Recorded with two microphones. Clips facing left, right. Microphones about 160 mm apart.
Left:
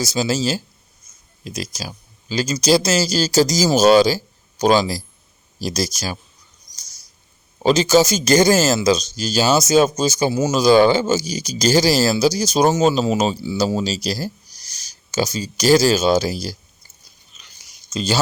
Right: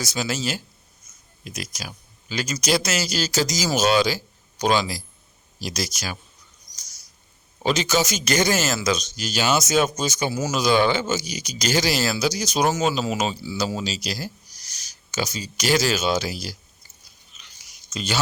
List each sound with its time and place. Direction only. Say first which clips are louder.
0.0 s speech: left 6 dB; 30° left (ahead or behind)
7.6 s speech: left 8 dB; 35° left (ahead or behind)
17.9 s speech: left 6 dB; 35° left (ahead or behind)